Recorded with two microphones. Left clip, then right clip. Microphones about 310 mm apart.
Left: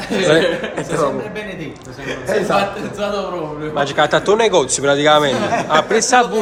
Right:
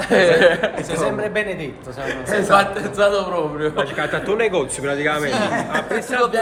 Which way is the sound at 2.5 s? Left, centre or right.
Right.